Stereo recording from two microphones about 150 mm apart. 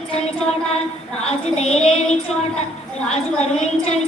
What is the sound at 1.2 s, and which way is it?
A woman's voice, 45° left (ahead or behind).